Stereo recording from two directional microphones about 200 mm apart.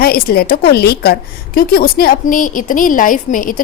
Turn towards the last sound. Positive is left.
turn(degrees=40)  # may be behind; listen again after turning